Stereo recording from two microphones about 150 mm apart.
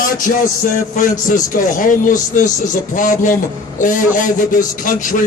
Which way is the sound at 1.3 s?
60° left (ahead or behind).